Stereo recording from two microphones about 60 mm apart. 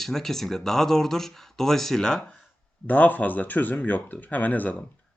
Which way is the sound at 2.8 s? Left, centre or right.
Left.